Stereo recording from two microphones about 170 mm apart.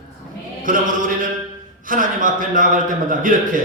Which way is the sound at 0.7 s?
55° right (ahead or behind).